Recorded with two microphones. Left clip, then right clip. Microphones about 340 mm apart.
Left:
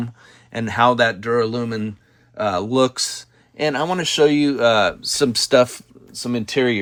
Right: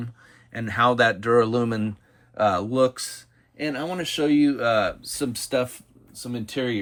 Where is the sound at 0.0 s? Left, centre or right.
Centre.